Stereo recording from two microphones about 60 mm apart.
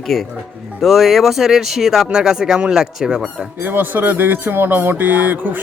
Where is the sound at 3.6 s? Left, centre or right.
Right.